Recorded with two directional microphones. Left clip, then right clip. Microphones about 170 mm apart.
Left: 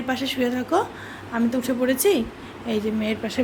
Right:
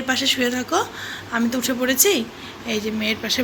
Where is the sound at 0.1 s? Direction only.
10° left (ahead or behind).